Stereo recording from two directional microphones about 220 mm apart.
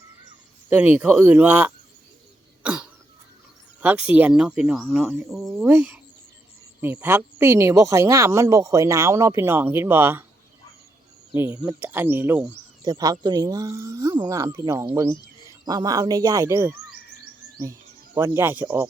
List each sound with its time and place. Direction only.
0.7 s speech: 10° right (ahead or behind)
2.6 s cough: 5° right (ahead or behind)
3.8 s speech: 5° right (ahead or behind)
11.3 s speech: 15° right (ahead or behind)